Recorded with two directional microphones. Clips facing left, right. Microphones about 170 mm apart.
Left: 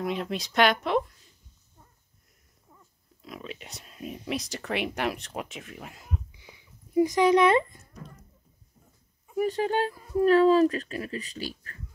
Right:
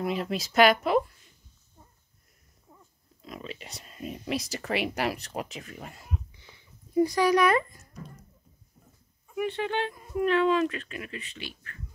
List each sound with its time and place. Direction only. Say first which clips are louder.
0.0 s speech: right 1 dB; centre (ahead or behind)
3.2 s speech: even; centre (ahead or behind)
6.3 s a sound: left 2 dB; 10° left (ahead or behind); by 7.9 s 30° left (ahead or behind)
9.3 s speech: left 3 dB; 40° left (ahead or behind)